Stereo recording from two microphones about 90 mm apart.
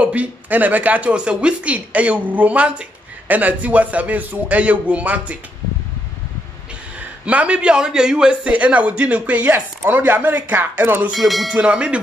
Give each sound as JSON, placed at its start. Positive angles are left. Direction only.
{"t": 0.0, "sound": "a man's voice", "side_deg": -15}
{"t": 7.2, "sound": "a man's voice", "side_deg": -15}
{"t": 11.1, "sound": "speech", "side_deg": 0}
{"t": 11.5, "sound": "a man's voice", "side_deg": -10}